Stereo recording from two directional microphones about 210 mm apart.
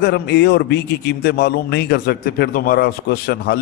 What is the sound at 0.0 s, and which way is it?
A man's voice, 50° left (ahead or behind).